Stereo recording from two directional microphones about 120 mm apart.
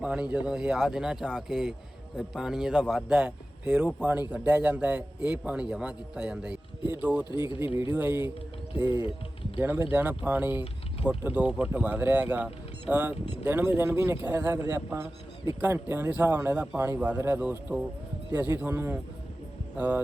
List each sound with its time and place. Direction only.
0.0 s speech: 10° right (ahead or behind)